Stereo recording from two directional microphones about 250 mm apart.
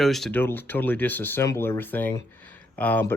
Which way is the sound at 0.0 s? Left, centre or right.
Centre.